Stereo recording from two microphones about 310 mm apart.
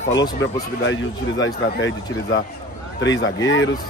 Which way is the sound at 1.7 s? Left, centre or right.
Left.